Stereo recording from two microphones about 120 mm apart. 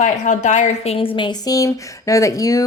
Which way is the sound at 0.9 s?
45° left (ahead or behind).